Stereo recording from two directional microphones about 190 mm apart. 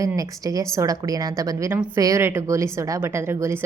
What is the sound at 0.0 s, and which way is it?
A woman's voice, 15° right (ahead or behind).